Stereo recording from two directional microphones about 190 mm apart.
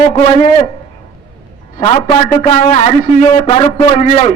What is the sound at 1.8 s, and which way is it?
A man's voice, 30° left (ahead or behind).